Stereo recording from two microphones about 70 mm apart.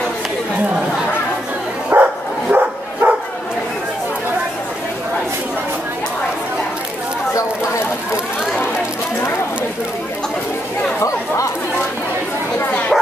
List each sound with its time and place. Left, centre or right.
1.9 s bow-wow: right
2.5 s dog: right
11.0 s chatter: left
12.9 s bow-wow: centre